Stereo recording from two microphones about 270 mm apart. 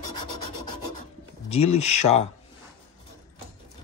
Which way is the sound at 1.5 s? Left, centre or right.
Left.